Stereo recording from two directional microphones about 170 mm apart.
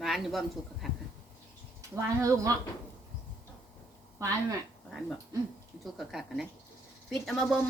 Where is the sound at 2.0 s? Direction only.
20° right (ahead or behind).